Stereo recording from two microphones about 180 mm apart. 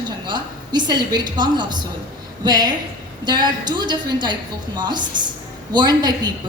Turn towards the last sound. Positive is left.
turn(degrees=-20)  # may be behind; listen again after turning